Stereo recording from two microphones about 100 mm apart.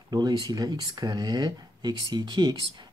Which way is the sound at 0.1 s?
45° right (ahead or behind).